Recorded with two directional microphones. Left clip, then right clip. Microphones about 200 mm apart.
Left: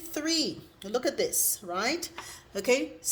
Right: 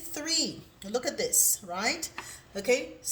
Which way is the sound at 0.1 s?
40° left (ahead or behind).